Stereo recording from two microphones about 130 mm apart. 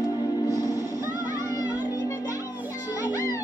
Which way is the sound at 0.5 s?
25° left (ahead or behind).